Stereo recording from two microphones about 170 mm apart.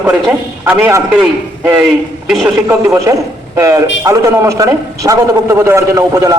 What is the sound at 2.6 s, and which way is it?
A man's voice, 15° right (ahead or behind).